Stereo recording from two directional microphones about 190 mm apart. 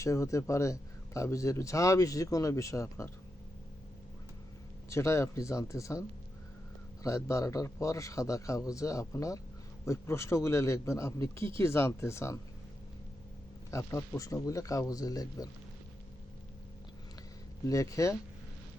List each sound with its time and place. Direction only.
0.0 s speech: 15° left (ahead or behind)
4.9 s speech: 15° left (ahead or behind)
13.7 s speech: 15° left (ahead or behind)
17.7 s speech: 15° left (ahead or behind)